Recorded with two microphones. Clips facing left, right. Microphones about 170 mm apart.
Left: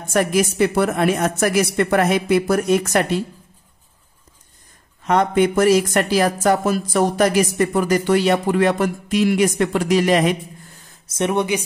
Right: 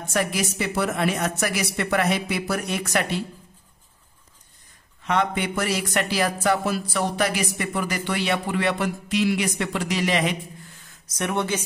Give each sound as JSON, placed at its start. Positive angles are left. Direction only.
{"t": 0.1, "sound": "speech", "side_deg": 50}
{"t": 5.0, "sound": "speech", "side_deg": 45}
{"t": 11.1, "sound": "a woman's voice", "side_deg": 25}